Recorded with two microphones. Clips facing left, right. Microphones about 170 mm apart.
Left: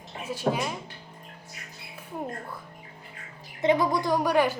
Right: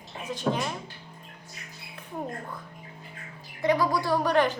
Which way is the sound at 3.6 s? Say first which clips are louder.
Left 1 dB; 20° left (ahead or behind).